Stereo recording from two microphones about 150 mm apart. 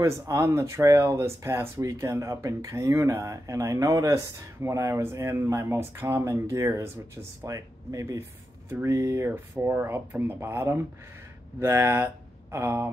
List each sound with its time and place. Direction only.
0.0 s speech: 20° right (ahead or behind)